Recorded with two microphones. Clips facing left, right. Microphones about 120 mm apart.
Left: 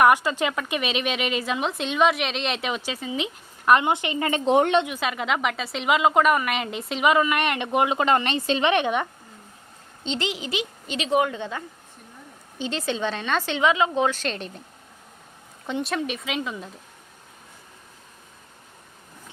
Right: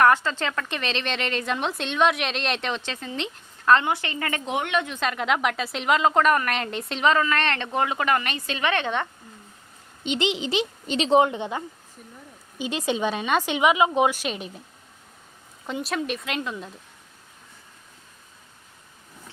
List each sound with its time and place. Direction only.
0.0 s speech: 15° left (ahead or behind)
3.7 s a woman's voice: 15° left (ahead or behind)
4.5 s a woman's voice: 35° left (ahead or behind)
4.9 s a woman's voice: 5° left (ahead or behind)
7.1 s speech: 15° left (ahead or behind)
10.0 s a woman's voice: 15° right (ahead or behind)
15.6 s a woman's voice: centre (ahead or behind)